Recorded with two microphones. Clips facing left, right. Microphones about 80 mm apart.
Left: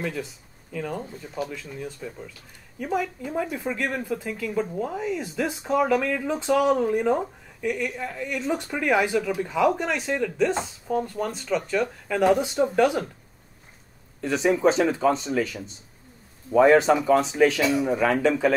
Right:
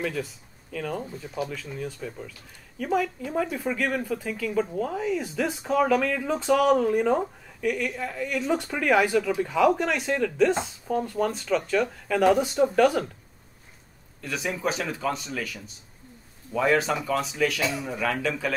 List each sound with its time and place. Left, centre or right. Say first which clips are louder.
0.0 s a woman's voice: right 1 dB; centre
14.2 s speech: left 8 dB; left